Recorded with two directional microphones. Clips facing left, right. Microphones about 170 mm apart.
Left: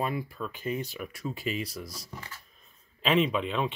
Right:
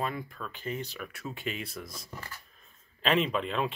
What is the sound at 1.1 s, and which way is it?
Speech, centre (ahead or behind).